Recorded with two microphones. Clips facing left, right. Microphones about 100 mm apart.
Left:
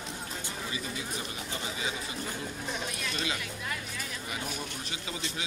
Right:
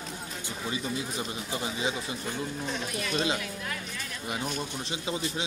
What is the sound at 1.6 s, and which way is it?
Speech, 25° right (ahead or behind).